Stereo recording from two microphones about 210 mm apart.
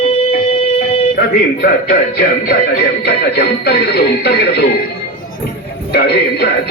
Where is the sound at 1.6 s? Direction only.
45° left (ahead or behind).